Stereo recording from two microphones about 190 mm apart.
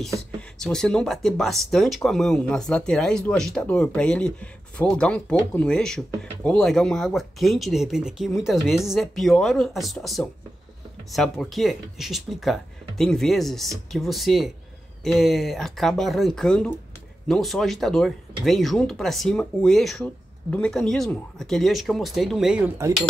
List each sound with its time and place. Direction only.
0.6 s speech: 5° left (ahead or behind)